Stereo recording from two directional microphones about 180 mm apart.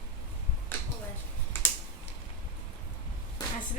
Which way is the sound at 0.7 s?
10° left (ahead or behind).